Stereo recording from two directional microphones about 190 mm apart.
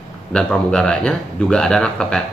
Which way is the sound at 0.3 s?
5° left (ahead or behind).